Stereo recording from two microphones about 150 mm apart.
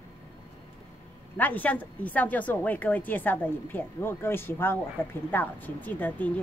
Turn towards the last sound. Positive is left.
turn(degrees=10)  # may be behind; listen again after turning